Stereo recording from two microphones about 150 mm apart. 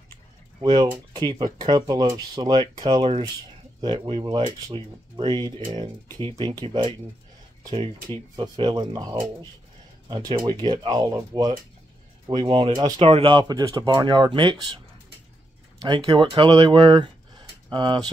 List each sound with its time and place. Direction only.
0.6 s speech: 35° right (ahead or behind)
8.4 s speech: 30° right (ahead or behind)
15.8 s speech: 30° right (ahead or behind)